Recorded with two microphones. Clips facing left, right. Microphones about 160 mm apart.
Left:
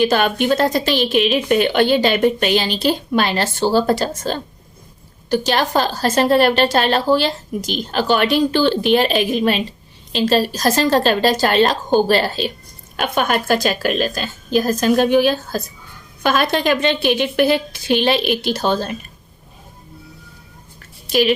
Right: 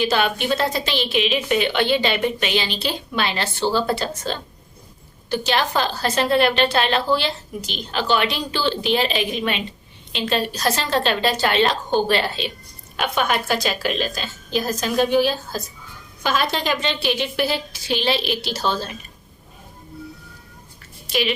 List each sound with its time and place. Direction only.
0.0 s a woman's voice: 45° left (ahead or behind)
21.1 s speech: 45° left (ahead or behind)